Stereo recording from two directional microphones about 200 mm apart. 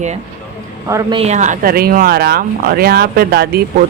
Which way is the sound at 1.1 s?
35° right (ahead or behind).